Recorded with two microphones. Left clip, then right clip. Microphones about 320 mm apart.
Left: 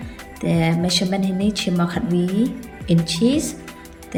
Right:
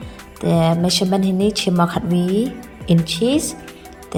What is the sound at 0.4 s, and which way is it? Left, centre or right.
A woman's voice, centre.